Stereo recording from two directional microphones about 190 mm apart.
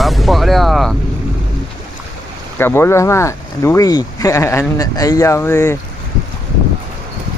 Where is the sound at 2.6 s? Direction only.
10° left (ahead or behind).